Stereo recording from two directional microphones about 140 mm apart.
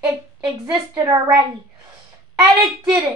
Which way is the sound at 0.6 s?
30° right (ahead or behind).